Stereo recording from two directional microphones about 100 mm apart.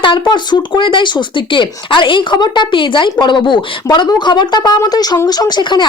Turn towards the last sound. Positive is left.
turn(degrees=45)  # may be behind; listen again after turning